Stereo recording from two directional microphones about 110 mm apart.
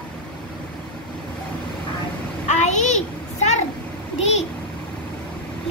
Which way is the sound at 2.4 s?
90° left.